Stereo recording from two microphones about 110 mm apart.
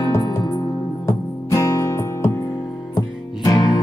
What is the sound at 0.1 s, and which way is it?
Music, 25° left (ahead or behind).